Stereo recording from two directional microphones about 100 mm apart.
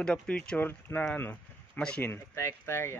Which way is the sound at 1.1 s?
15° left (ahead or behind).